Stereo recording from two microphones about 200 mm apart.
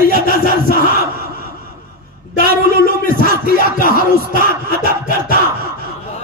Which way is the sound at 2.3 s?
45° left (ahead or behind).